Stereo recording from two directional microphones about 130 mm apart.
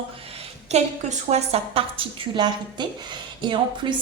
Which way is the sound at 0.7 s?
60° right (ahead or behind).